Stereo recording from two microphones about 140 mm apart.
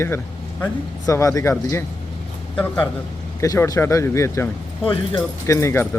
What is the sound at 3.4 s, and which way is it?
Speech, 25° left (ahead or behind).